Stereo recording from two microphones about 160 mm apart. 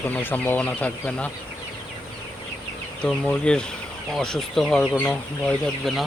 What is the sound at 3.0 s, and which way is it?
Speech, 5° left (ahead or behind).